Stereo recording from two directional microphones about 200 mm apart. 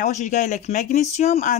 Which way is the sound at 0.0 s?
35° left (ahead or behind).